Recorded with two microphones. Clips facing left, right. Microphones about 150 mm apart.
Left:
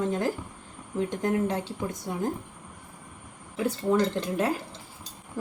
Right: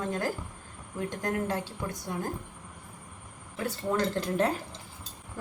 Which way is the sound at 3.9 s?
15° left (ahead or behind).